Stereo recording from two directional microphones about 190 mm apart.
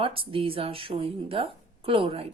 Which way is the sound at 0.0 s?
30° right (ahead or behind).